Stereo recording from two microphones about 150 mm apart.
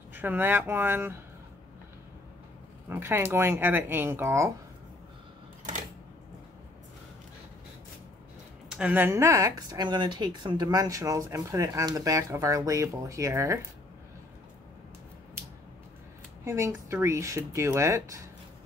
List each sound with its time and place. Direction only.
0.1 s speech: 10° right (ahead or behind)
2.9 s speech: 15° right (ahead or behind)
8.6 s speech: 10° right (ahead or behind)
16.4 s speech: 20° right (ahead or behind)